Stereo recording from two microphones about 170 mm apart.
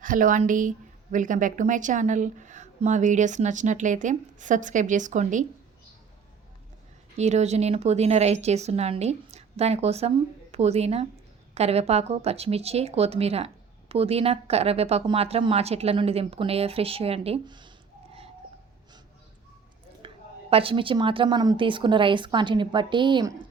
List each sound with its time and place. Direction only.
0.0 s speech: 50° right (ahead or behind)
7.2 s speech: 40° right (ahead or behind)
20.0 s a sound: 30° right (ahead or behind)
20.5 s a woman's voice: 35° right (ahead or behind)